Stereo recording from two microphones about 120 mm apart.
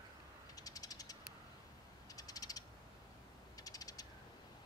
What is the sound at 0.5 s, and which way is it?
Mechanisms, 30° left (ahead or behind).